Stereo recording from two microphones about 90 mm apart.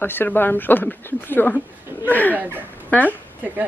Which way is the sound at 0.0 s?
25° left (ahead or behind).